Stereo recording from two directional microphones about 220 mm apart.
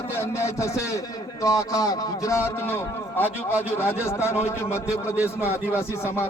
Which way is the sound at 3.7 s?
10° left (ahead or behind).